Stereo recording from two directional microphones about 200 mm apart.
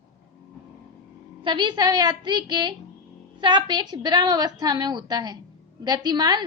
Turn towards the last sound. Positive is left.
turn(degrees=-20)  # may be behind; listen again after turning